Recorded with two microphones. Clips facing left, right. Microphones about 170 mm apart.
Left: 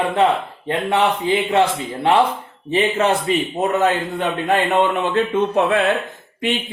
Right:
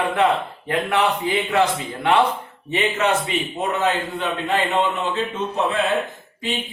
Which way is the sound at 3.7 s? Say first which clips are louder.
Left 3 dB; 50° left (ahead or behind).